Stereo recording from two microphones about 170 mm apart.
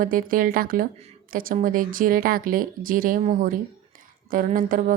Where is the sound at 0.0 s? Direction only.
55° right (ahead or behind).